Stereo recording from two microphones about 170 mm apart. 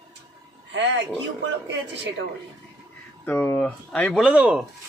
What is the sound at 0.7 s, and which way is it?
Speech, 90° right.